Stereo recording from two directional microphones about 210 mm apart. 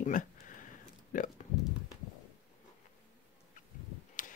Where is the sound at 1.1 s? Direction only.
40° left (ahead or behind).